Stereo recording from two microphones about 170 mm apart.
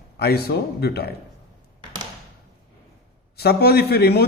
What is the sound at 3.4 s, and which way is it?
Speech, 70° left (ahead or behind).